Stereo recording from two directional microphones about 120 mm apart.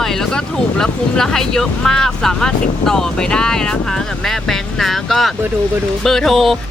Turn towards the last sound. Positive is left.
turn(degrees=0)  # may be behind; listen again after turning